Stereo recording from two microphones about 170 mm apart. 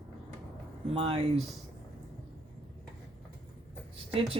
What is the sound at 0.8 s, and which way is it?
Speech, 35° right (ahead or behind).